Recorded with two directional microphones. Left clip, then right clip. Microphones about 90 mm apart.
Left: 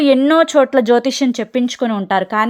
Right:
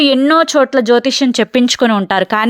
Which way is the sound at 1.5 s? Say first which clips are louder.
Right 6 dB; 40° right (ahead or behind).